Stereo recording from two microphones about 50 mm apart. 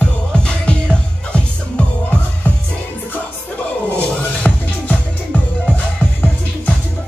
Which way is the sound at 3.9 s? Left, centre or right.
Left.